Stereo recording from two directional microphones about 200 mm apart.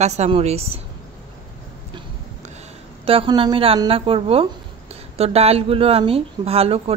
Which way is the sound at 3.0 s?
25° right (ahead or behind).